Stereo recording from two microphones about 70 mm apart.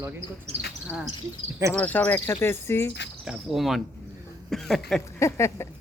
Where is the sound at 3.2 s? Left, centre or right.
Centre.